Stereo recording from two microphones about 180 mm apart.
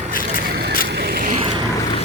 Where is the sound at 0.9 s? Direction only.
60° right (ahead or behind).